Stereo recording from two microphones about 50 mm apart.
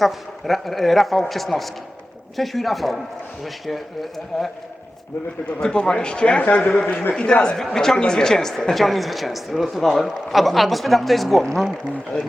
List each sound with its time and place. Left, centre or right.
0.0 s speech: centre
5.5 s a woman's voice: centre